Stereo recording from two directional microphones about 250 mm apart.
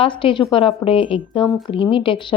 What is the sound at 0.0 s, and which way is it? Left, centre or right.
Speech, centre.